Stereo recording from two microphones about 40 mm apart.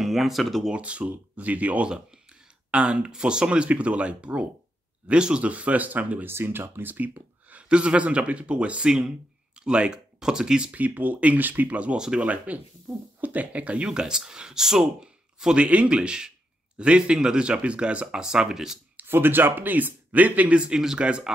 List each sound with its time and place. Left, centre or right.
0.0 s speech: centre
0.7 s speech: right
2.7 s a man's voice: right
5.4 s speech: right
6.2 s speech: right
7.6 s a man's voice: right
10.7 s speech: right
11.7 s speech: right
13.8 s speech: centre
15.5 s a man's voice: right; by 18.8 s centre
19.0 s speech: right
20.5 s a man's voice: right